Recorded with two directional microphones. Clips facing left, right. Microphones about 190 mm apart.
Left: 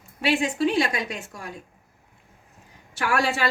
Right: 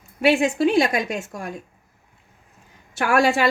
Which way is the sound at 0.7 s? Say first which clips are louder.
Right 5 dB; 45° right (ahead or behind).